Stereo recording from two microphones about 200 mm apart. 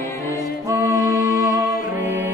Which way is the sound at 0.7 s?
15° right (ahead or behind).